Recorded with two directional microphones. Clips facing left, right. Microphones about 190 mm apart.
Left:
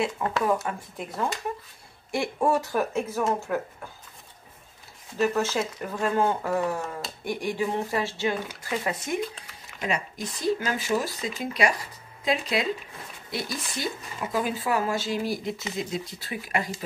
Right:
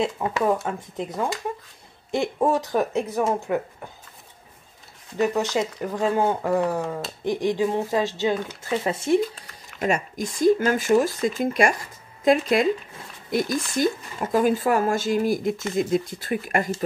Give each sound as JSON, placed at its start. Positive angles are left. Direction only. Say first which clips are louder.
{"t": 0.7, "sound": "speech", "louder": "right 4 dB", "side_deg": -20}
{"t": 5.3, "sound": "speech", "louder": "right 3 dB", "side_deg": -15}
{"t": 9.8, "sound": "speech", "louder": "right 6 dB", "side_deg": -45}